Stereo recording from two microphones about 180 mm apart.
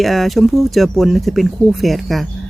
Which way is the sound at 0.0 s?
Centre (ahead or behind).